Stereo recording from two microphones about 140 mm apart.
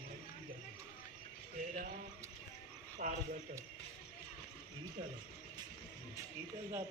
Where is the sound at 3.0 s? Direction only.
70° right (ahead or behind).